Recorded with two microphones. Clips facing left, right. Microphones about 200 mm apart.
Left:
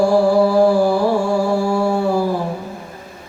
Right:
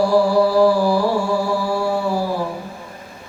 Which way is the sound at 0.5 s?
50° left (ahead or behind).